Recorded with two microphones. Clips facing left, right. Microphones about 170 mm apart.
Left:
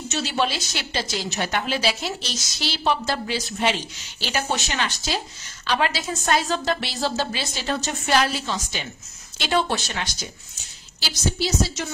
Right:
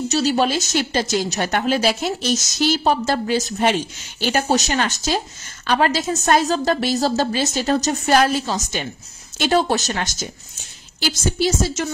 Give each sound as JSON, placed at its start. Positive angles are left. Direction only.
{"t": 0.1, "sound": "a woman's voice", "side_deg": -40}